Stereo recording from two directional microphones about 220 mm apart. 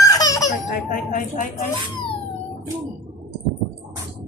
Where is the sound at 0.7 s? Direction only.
40° left (ahead or behind).